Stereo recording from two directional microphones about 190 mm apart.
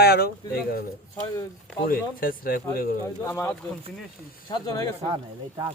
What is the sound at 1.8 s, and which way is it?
Speech, 50° left (ahead or behind).